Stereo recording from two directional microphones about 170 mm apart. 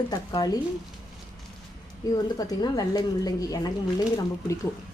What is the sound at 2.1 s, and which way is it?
Speech, 25° left (ahead or behind).